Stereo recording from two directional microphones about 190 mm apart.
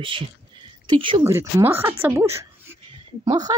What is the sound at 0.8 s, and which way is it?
Speech, 25° right (ahead or behind).